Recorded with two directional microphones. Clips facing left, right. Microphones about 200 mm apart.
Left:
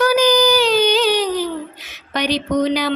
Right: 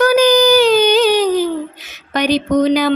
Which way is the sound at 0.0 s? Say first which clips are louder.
Right 4 dB; 50° right (ahead or behind).